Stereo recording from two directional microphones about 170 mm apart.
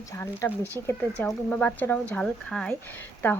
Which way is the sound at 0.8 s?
25° right (ahead or behind).